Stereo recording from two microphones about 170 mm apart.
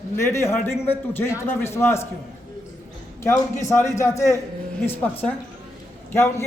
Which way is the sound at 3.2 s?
15° left (ahead or behind).